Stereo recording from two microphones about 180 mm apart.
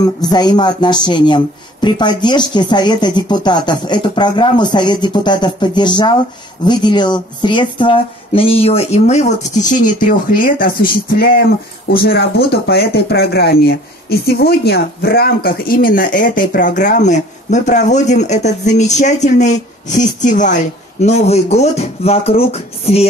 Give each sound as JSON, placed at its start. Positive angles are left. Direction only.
{"t": 0.0, "sound": "speech", "side_deg": 20}